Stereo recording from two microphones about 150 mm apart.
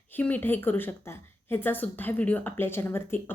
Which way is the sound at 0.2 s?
10° left (ahead or behind).